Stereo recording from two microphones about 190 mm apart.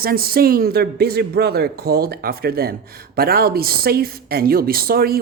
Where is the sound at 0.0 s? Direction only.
55° right (ahead or behind).